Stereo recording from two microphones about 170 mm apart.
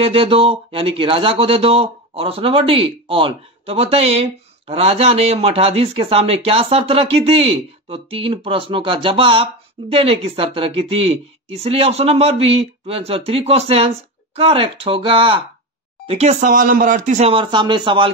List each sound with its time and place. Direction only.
0.0 s speech: 35° right (ahead or behind)